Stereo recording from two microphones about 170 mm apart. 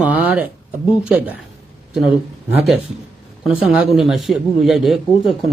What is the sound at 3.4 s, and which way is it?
A man's voice, 5° right (ahead or behind).